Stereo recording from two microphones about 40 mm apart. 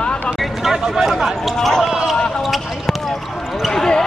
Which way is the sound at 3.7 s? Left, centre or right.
Centre.